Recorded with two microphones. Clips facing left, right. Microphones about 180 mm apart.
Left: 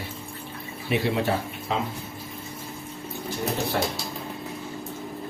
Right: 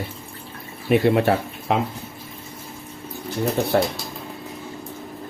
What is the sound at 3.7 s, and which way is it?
Speech, 50° right (ahead or behind).